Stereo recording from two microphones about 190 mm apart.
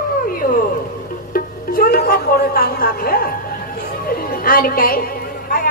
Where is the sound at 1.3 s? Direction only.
50° left (ahead or behind).